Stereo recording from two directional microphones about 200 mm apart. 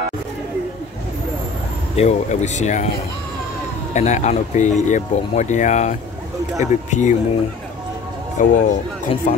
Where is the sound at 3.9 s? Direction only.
35° left (ahead or behind).